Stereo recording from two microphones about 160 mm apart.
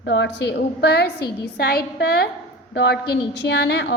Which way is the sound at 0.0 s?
90° left.